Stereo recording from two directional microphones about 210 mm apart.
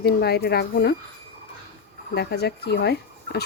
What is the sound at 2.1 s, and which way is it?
Speech, 50° left (ahead or behind).